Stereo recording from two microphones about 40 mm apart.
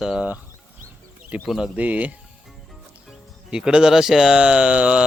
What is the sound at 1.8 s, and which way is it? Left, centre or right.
Speech, right.